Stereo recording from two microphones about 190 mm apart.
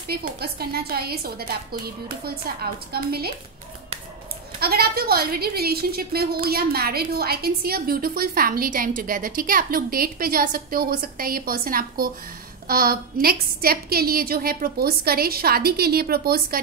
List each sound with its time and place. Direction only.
0.1 s a woman's voice: 55° right (ahead or behind)
4.6 s a woman's voice: 55° right (ahead or behind)